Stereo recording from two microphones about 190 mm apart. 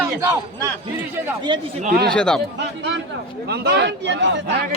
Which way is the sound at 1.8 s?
45° right (ahead or behind).